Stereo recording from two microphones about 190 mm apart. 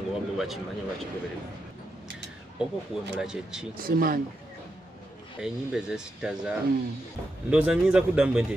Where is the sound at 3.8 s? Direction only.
50° right (ahead or behind).